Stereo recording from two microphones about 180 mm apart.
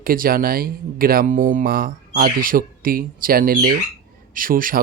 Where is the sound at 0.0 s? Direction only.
55° right (ahead or behind).